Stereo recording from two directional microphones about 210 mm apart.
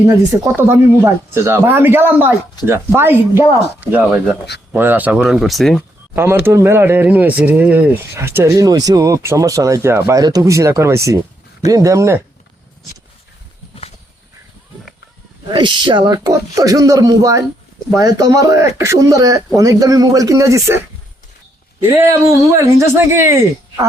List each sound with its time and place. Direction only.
0.3 s speech: 10° right (ahead or behind)
6.1 s speech: 10° right (ahead or behind)
15.5 s speech: 20° right (ahead or behind)
22.5 s speech: 15° right (ahead or behind)